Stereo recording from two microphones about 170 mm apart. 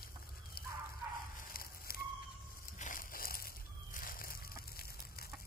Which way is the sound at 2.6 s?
50° left (ahead or behind).